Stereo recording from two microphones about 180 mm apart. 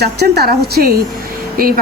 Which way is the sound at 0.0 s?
65° right (ahead or behind).